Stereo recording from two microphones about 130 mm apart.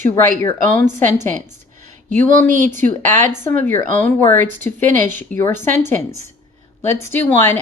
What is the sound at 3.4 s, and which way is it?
Speech, 15° left (ahead or behind).